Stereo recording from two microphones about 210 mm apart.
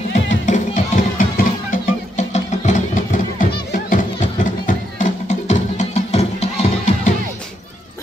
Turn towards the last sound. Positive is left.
turn(degrees=30)  # may be behind; listen again after turning